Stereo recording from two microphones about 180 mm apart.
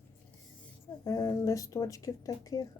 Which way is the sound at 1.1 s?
20° left (ahead or behind).